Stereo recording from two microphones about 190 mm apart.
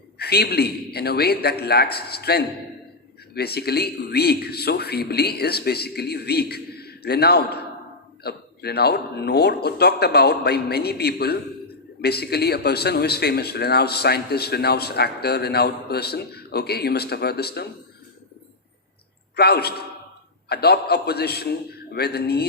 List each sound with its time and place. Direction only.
0.2 s speech: 55° left (ahead or behind)
19.4 s speech: 55° left (ahead or behind)